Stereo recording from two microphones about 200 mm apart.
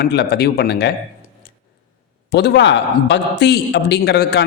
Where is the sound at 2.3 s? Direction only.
60° left (ahead or behind).